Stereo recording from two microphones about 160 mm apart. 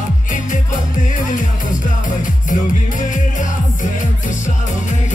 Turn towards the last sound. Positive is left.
turn(degrees=55)  # may be behind; listen again after turning